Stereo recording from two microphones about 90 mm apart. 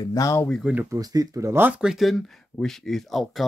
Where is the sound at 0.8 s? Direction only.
40° right (ahead or behind).